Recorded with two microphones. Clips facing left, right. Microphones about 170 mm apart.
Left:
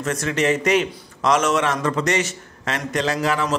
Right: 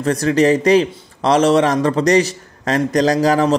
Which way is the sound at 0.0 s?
35° right (ahead or behind).